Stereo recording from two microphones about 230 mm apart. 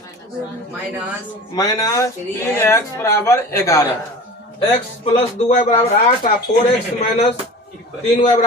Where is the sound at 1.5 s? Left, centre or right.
Centre.